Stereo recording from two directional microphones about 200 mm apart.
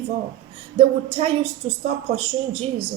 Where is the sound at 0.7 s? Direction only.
30° right (ahead or behind).